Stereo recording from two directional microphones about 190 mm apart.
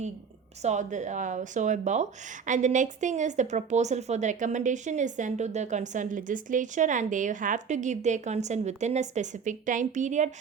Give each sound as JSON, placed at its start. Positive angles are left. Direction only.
{"t": 0.6, "sound": "a woman's voice", "side_deg": -40}